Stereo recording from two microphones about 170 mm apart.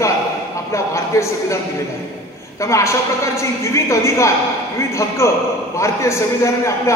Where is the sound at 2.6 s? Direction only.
15° left (ahead or behind).